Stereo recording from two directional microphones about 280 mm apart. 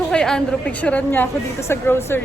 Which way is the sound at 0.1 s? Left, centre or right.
Centre.